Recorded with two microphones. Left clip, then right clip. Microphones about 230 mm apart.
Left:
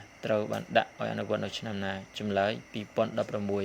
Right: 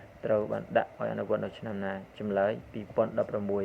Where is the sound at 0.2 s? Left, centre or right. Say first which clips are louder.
Right 1 dB; left.